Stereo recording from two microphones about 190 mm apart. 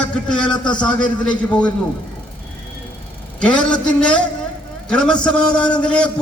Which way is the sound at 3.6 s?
5° left (ahead or behind).